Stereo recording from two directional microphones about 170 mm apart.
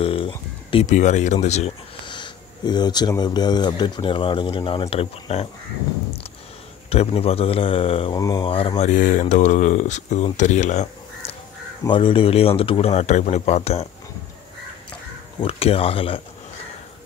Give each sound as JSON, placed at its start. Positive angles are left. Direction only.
{"t": 0.0, "sound": "a sound", "side_deg": 30}
{"t": 0.8, "sound": "speech", "side_deg": 45}
{"t": 2.0, "sound": "speech", "side_deg": 25}
{"t": 6.9, "sound": "a man's voice", "side_deg": 35}
{"t": 8.2, "sound": "speech", "side_deg": 20}
{"t": 8.5, "sound": "speech", "side_deg": 35}
{"t": 11.8, "sound": "a man's voice", "side_deg": 30}
{"t": 15.4, "sound": "a man's voice", "side_deg": 35}